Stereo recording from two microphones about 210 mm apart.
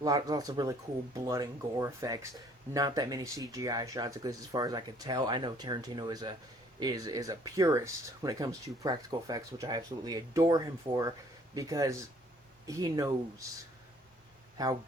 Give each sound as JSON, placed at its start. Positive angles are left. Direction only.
{"t": 0.0, "sound": "speech", "side_deg": -20}